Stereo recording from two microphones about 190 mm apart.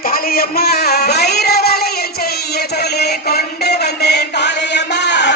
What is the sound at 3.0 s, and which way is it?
Chant, 55° left (ahead or behind).